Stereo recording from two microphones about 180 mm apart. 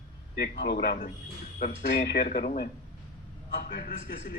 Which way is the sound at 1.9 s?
65° left (ahead or behind).